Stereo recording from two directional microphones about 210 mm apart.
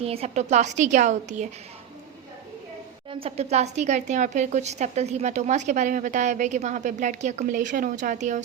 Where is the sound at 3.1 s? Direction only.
30° right (ahead or behind).